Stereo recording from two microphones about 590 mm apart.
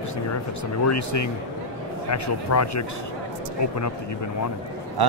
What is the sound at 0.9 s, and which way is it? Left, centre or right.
Speech, left.